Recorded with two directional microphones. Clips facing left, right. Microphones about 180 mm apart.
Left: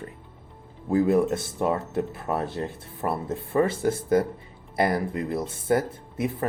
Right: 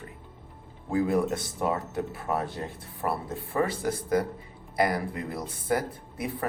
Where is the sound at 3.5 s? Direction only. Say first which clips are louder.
Left 5 dB; 25° left (ahead or behind).